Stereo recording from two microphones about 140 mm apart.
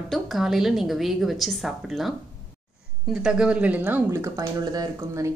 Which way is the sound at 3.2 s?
5° right (ahead or behind).